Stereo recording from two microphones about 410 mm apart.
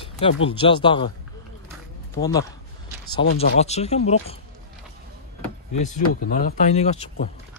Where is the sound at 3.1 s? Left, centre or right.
Centre.